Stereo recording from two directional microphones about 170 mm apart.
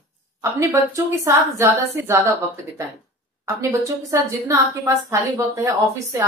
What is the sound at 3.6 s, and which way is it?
A woman's voice, 15° right (ahead or behind).